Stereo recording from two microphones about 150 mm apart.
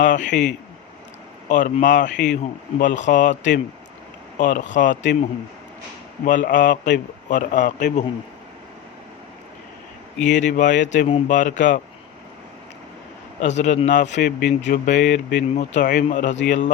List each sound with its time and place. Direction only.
0.0 s a man's voice: 60° left (ahead or behind)
1.5 s a man's voice: 60° left (ahead or behind)
6.2 s a man's voice: 60° left (ahead or behind)
10.2 s a man's voice: 55° left (ahead or behind)
13.4 s a man's voice: 50° left (ahead or behind)
14.2 s speech: 90° left
14.6 s speech: 60° left (ahead or behind); by 15.4 s 90° left
15.5 s a man's voice: 55° left (ahead or behind)
16.0 s a man's voice: 50° left (ahead or behind)